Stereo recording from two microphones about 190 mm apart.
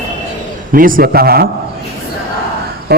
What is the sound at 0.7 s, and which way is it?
Speech, 50° right (ahead or behind).